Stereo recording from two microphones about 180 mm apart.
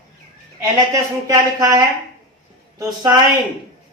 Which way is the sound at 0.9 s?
20° right (ahead or behind).